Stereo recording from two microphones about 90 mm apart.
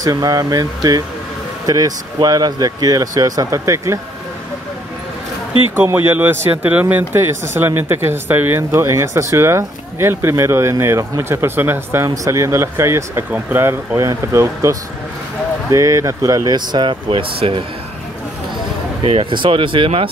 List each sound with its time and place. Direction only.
0.0 s speech: 45° right (ahead or behind)
3.4 s speech: 35° right (ahead or behind)
5.9 s speech: 25° right (ahead or behind); by 17.6 s 85° right
19.0 s speech: 80° right